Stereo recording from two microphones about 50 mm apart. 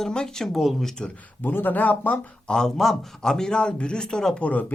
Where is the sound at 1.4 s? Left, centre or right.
Left.